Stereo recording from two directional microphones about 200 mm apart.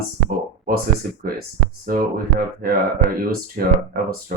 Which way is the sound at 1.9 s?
45° right (ahead or behind).